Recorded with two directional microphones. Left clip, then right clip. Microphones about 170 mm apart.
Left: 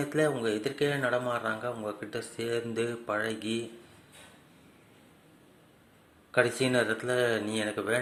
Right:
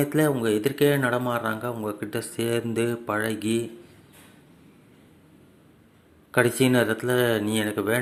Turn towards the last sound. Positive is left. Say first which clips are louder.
# right 5 dB
turn(degrees=-25)  # may be behind; listen again after turning